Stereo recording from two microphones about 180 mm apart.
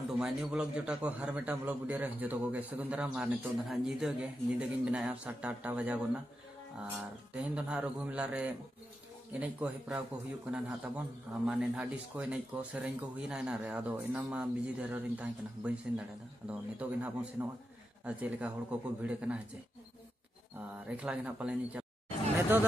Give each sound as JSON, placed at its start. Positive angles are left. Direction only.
{"t": 0.2, "sound": "speech", "side_deg": -5}
{"t": 20.8, "sound": "speech", "side_deg": -5}